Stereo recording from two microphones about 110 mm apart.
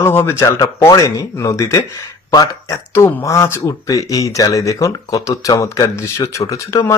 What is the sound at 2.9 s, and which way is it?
Speech, 25° left (ahead or behind).